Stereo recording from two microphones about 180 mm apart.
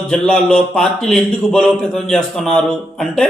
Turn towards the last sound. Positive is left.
turn(degrees=5)  # may be behind; listen again after turning